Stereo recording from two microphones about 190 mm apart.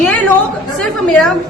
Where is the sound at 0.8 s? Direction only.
5° left (ahead or behind).